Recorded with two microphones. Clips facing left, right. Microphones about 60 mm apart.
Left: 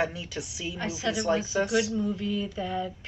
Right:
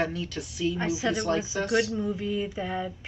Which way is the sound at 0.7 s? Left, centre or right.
Right.